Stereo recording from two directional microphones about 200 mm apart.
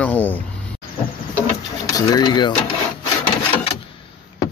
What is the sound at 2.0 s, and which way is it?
Speech, 20° left (ahead or behind).